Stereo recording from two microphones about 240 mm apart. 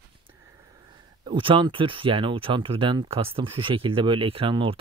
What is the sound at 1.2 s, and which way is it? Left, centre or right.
Speech, right.